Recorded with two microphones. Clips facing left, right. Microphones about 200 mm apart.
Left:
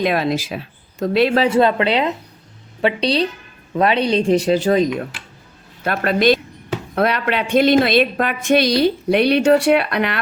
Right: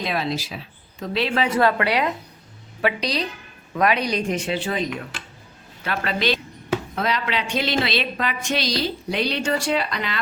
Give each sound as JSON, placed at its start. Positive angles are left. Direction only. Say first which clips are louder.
{"t": 0.0, "sound": "speech", "louder": "left 7 dB", "side_deg": 55}
{"t": 1.4, "sound": "a woman's voice", "louder": "left 5 dB", "side_deg": 25}
{"t": 6.9, "sound": "speech", "louder": "left 11 dB", "side_deg": 60}